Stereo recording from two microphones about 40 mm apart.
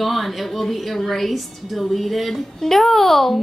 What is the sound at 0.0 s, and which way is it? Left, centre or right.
A woman's voice, centre.